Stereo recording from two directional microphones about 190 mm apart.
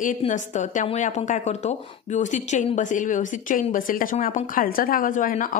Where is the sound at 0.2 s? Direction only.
40° left (ahead or behind).